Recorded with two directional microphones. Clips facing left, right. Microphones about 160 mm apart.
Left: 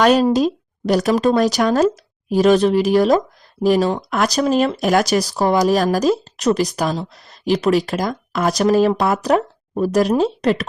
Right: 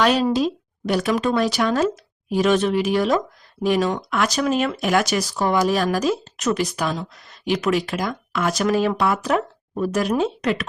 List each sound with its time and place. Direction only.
0.0 s speech: 45° left (ahead or behind)